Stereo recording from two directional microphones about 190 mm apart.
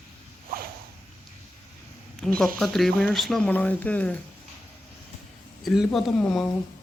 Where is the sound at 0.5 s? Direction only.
50° right (ahead or behind).